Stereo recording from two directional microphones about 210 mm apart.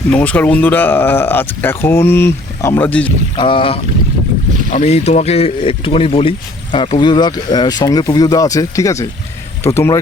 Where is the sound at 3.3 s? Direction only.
25° left (ahead or behind).